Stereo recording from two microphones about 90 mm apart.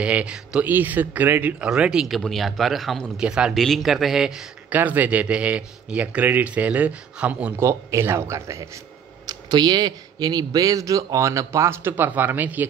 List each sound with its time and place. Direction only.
0.0 s speech: 15° right (ahead or behind)
1.7 s speech: 10° right (ahead or behind)
3.5 s speech: centre (ahead or behind)
4.6 s speech: 20° right (ahead or behind)
7.5 s speech: 30° right (ahead or behind)
9.2 s speech: 50° right (ahead or behind); by 11.9 s 30° right (ahead or behind)
11.9 s speech: 20° right (ahead or behind)